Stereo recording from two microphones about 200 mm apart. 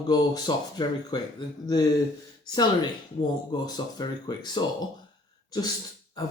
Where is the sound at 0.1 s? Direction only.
20° left (ahead or behind).